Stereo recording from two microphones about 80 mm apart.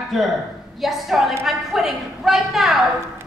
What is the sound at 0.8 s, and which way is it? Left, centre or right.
A man's voice, centre.